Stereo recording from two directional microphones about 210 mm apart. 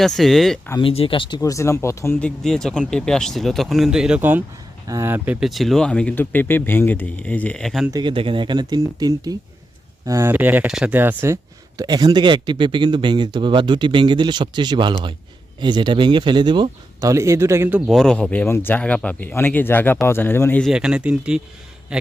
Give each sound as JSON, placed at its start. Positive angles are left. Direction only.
{"t": 0.0, "sound": "a man's voice", "side_deg": 0}
{"t": 0.7, "sound": "a man's voice", "side_deg": 25}
{"t": 7.9, "sound": "a man's voice", "side_deg": -20}